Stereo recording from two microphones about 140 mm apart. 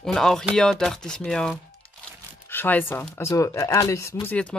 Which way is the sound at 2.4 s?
15° left (ahead or behind).